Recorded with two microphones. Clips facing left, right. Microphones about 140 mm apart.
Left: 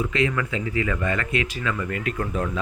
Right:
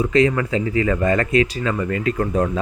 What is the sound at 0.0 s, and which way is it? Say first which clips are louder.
A man's voice: right 7 dB; 35° right (ahead or behind).